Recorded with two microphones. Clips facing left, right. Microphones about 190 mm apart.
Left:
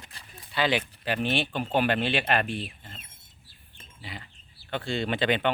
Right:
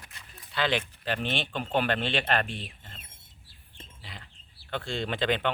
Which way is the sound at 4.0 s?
5° left (ahead or behind).